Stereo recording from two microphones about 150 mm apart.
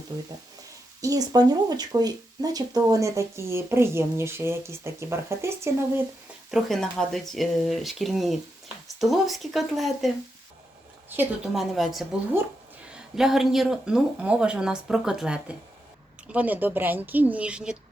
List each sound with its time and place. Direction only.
1.0 s speech: 25° right (ahead or behind)
6.5 s speech: 5° left (ahead or behind)
11.5 s speech: centre (ahead or behind)